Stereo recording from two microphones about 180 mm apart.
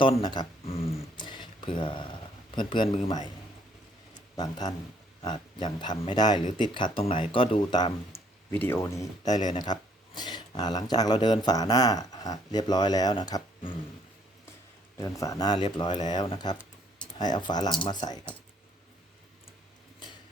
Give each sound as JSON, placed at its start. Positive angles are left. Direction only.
{"t": 0.0, "sound": "a sound", "side_deg": 25}
{"t": 1.6, "sound": "speech", "side_deg": 25}
{"t": 4.4, "sound": "speech", "side_deg": 20}
{"t": 14.9, "sound": "speech", "side_deg": 20}